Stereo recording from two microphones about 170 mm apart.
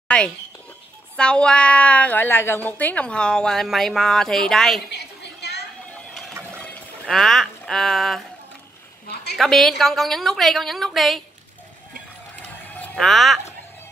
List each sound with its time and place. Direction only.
0.1 s a child's voice: 5° left (ahead or behind)
4.9 s chatter: 75° left (ahead or behind)
6.6 s speech: 5° left (ahead or behind)
9.0 s a sound: 75° left (ahead or behind)
9.4 s a woman's voice: centre (ahead or behind)
12.7 s speech: 5° left (ahead or behind)